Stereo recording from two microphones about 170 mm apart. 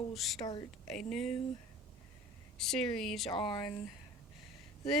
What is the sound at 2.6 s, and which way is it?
Speech, 5° left (ahead or behind).